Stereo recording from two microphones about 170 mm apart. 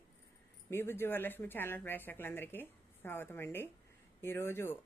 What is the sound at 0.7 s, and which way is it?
Speech, 15° left (ahead or behind).